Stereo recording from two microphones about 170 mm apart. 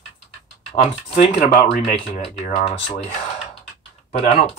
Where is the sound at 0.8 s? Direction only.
40° left (ahead or behind).